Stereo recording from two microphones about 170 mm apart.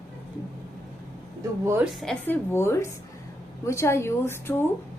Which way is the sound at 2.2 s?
15° left (ahead or behind).